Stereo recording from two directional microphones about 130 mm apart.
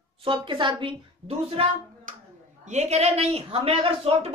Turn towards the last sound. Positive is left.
turn(degrees=-45)  # may be behind; listen again after turning